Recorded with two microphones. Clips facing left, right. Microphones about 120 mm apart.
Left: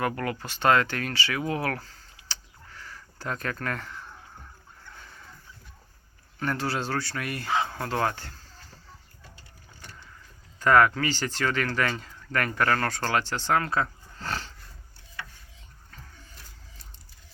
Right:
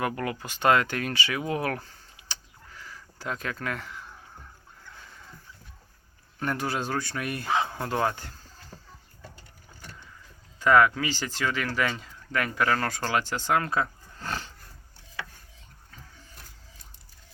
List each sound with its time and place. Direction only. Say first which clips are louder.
0.0 s speech: left 1 dB; 15° right (ahead or behind)
6.4 s speech: even; 15° right (ahead or behind)
10.6 s speech: even; 5° right (ahead or behind)